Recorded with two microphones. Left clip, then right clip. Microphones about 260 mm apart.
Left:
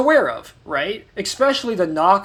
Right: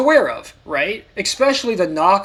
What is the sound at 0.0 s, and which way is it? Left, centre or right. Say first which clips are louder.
Speech: right 2 dB; left.